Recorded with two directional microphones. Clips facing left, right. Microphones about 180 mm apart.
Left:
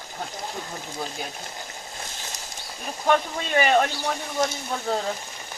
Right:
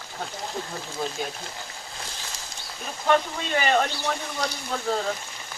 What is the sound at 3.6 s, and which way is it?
Speech, 20° left (ahead or behind).